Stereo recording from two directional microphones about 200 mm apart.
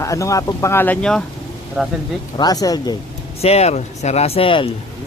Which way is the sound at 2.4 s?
20° left (ahead or behind).